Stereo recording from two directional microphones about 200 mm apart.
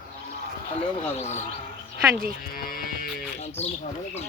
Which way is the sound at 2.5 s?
45° left (ahead or behind).